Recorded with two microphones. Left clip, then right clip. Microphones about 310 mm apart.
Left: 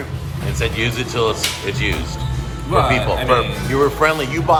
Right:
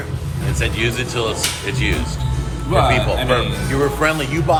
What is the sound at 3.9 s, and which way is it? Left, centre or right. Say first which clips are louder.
Speech: left 2 dB; left.